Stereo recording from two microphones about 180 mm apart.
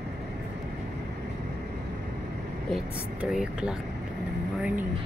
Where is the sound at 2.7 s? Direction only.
5° right (ahead or behind).